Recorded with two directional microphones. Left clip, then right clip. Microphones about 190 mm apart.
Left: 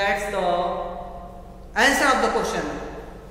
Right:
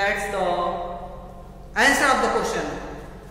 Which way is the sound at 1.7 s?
15° left (ahead or behind).